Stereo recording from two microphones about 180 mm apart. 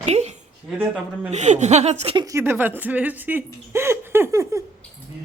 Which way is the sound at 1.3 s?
40° right (ahead or behind).